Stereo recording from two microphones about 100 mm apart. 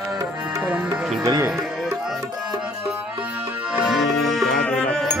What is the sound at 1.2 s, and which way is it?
Speech, 40° right (ahead or behind).